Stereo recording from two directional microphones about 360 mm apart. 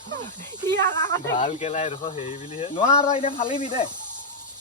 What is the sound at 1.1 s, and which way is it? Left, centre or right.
Speech, centre.